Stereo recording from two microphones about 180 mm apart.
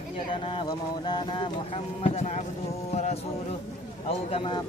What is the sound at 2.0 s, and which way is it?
Speech, 35° left (ahead or behind).